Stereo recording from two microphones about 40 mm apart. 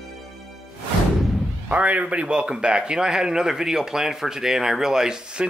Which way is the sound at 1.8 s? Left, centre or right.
Right.